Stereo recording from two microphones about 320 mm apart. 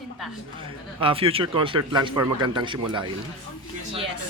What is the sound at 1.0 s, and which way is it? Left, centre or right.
Speech, centre.